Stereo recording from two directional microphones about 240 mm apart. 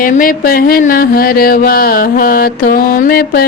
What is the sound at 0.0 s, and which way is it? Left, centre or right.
Music, left.